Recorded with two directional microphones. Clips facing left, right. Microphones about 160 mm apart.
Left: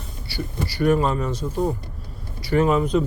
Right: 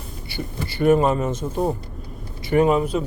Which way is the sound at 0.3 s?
20° right (ahead or behind).